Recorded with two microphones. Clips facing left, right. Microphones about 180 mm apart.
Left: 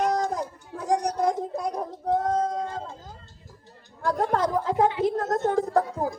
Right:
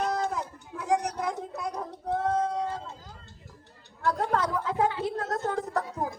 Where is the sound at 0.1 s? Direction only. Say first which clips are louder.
Left 4 dB; 35° left (ahead or behind).